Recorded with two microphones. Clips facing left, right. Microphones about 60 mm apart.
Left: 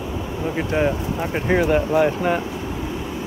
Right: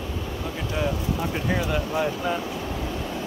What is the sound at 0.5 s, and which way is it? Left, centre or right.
Speech, left.